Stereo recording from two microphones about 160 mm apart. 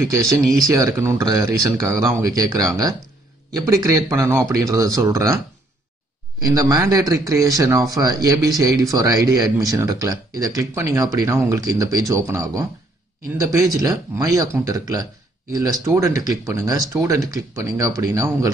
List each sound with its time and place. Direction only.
0.3 s speech: centre (ahead or behind)
0.7 s speech: 20° right (ahead or behind)
6.4 s speech: 20° right (ahead or behind)